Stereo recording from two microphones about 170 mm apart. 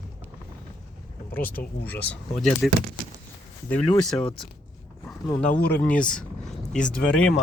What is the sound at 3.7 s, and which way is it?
Speech, 35° left (ahead or behind).